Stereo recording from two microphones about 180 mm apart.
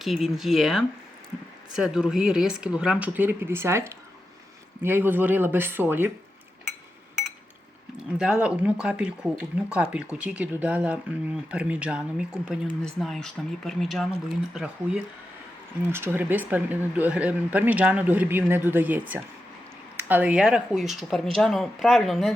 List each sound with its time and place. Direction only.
0.0 s speech: centre (ahead or behind)
8.2 s speech: 5° right (ahead or behind)